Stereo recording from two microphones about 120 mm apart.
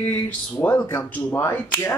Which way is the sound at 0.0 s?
15° left (ahead or behind).